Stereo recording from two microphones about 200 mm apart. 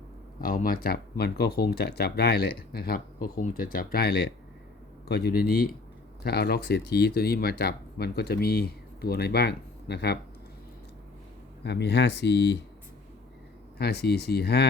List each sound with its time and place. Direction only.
0.3 s speech: 45° left (ahead or behind)
11.6 s speech: 55° left (ahead or behind)
13.7 s speech: 55° left (ahead or behind)